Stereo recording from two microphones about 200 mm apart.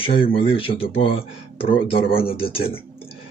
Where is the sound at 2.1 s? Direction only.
30° left (ahead or behind).